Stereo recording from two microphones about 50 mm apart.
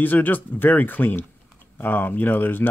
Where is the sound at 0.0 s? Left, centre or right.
Left.